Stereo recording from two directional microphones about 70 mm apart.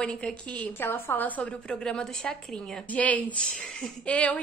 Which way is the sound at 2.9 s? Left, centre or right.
Left.